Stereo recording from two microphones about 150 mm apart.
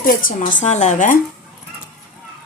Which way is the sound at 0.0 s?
65° left (ahead or behind).